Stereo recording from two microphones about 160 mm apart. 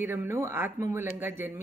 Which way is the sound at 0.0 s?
15° right (ahead or behind).